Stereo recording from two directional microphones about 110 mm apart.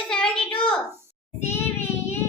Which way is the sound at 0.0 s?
5° left (ahead or behind).